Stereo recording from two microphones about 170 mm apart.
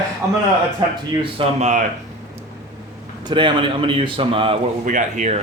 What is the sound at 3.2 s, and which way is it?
A man's voice, 30° right (ahead or behind).